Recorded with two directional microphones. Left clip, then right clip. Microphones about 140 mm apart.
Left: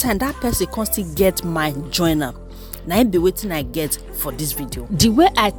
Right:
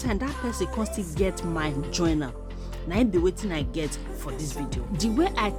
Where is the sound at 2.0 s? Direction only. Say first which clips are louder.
Left 7 dB; 60° left (ahead or behind).